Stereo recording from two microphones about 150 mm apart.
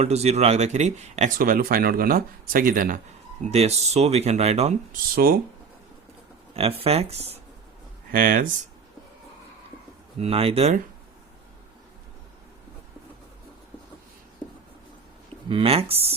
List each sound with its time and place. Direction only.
0.0 s speech: 45° right (ahead or behind); by 3.0 s 70° right (ahead or behind)
3.5 s speech: 45° right (ahead or behind)
5.1 s speech: 80° right
6.5 s speech: 40° right (ahead or behind)
8.1 s speech: 70° right (ahead or behind)
10.2 s speech: 40° right (ahead or behind)
15.4 s speech: 40° right (ahead or behind)